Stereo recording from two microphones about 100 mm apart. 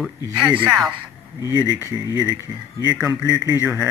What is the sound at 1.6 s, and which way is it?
A man's voice, 25° right (ahead or behind).